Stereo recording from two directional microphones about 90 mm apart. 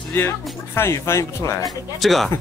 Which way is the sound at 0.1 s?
25° left (ahead or behind).